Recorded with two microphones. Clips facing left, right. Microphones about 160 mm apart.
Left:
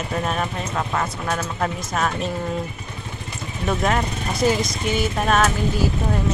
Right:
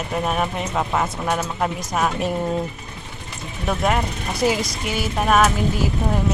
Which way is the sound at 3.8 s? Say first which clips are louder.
Right 2 dB; 10° right (ahead or behind).